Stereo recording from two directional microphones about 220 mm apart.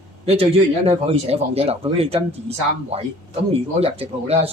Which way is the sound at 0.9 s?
25° right (ahead or behind).